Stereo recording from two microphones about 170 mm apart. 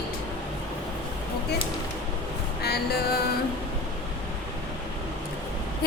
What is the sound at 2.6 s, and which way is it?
Music, 70° left (ahead or behind).